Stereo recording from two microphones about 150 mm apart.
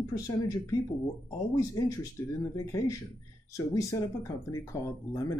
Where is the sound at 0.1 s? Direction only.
25° left (ahead or behind).